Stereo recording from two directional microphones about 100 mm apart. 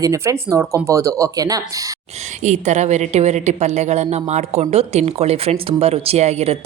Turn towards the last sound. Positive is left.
turn(degrees=-90)